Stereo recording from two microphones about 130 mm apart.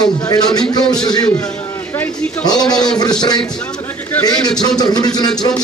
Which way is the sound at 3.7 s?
30° left (ahead or behind).